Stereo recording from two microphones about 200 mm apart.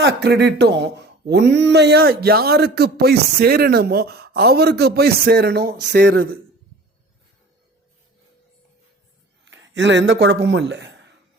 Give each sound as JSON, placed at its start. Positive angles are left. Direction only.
{"t": 0.0, "sound": "a man's voice", "side_deg": -55}
{"t": 9.4, "sound": "speech", "side_deg": -65}